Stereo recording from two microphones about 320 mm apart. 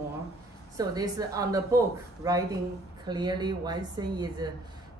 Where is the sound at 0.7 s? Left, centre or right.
Centre.